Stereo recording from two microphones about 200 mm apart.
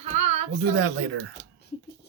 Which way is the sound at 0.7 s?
65° right (ahead or behind).